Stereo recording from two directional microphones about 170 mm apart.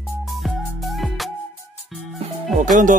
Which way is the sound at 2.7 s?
50° right (ahead or behind).